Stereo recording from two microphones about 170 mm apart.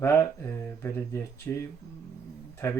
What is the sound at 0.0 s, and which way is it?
Mantra, 15° left (ahead or behind).